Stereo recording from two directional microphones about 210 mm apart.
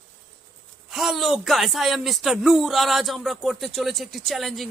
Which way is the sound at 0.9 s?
Centre (ahead or behind).